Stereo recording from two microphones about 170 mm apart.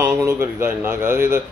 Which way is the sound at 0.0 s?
15° right (ahead or behind).